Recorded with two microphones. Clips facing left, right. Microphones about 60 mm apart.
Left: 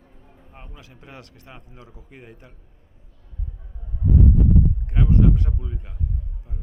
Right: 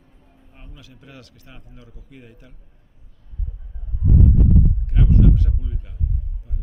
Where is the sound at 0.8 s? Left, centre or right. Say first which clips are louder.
Right 1 dB; left.